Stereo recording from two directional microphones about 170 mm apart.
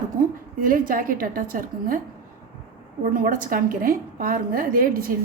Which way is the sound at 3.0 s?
55° right (ahead or behind).